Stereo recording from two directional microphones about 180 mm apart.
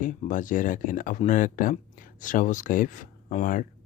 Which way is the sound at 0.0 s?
45° left (ahead or behind).